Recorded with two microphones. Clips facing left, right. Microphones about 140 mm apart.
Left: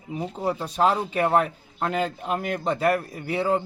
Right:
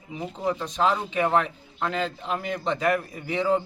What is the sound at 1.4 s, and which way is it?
A man's voice, 45° left (ahead or behind).